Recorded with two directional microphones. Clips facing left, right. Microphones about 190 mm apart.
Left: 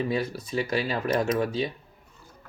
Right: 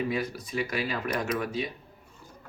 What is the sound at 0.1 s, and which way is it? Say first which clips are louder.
Speech: left 3 dB; 30° left (ahead or behind).